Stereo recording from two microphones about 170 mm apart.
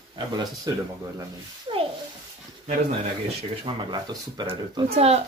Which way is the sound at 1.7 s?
30° right (ahead or behind).